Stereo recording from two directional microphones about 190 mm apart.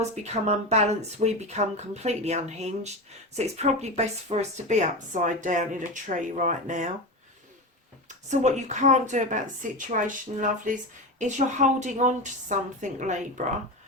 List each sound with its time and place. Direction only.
0.3 s speech: 35° right (ahead or behind)
8.0 s speech: 40° right (ahead or behind)